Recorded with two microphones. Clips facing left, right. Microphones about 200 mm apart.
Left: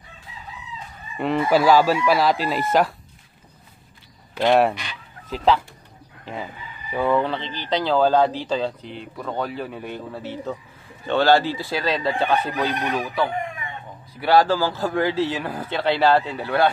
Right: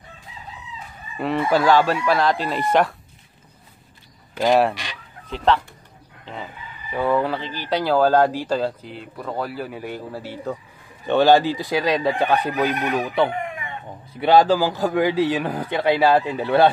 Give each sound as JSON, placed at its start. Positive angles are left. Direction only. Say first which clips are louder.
{"t": 1.1, "sound": "speech", "louder": "left 1 dB", "side_deg": 0}
{"t": 4.4, "sound": "speech", "louder": "even", "side_deg": 0}
{"t": 6.9, "sound": "speech", "louder": "even", "side_deg": 0}
{"t": 13.0, "sound": "speech", "louder": "right 3 dB", "side_deg": -25}